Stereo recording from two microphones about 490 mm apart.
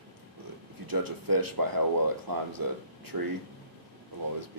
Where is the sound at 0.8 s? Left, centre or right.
Right.